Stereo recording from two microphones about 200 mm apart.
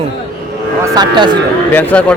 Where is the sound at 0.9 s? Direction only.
20° right (ahead or behind).